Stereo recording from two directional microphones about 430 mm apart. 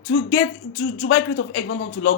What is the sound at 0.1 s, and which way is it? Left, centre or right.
Speech, left.